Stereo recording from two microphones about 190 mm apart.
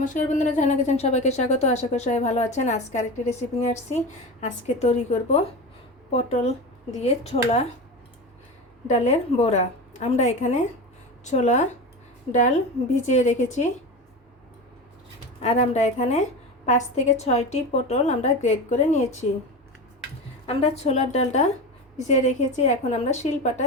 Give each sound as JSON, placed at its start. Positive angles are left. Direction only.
{"t": 0.0, "sound": "a woman's voice", "side_deg": 40}
{"t": 8.9, "sound": "a woman's voice", "side_deg": 35}
{"t": 15.4, "sound": "a woman's voice", "side_deg": 35}
{"t": 20.5, "sound": "a woman's voice", "side_deg": 30}